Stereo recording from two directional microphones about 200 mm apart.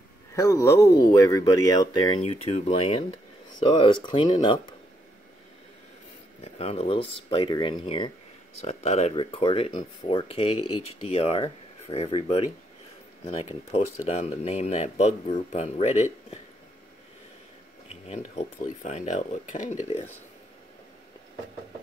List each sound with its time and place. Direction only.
0.3 s speech: 15° left (ahead or behind)
2.2 s speech: 30° left (ahead or behind)
6.4 s speech: 30° left (ahead or behind)
13.7 s speech: 30° left (ahead or behind)
17.8 s speech: 35° left (ahead or behind)